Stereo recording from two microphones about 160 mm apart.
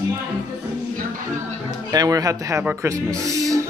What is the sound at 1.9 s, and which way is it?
Speech, 20° right (ahead or behind).